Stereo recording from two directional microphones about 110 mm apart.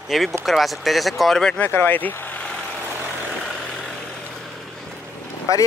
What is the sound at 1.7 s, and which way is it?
Speech, 20° left (ahead or behind).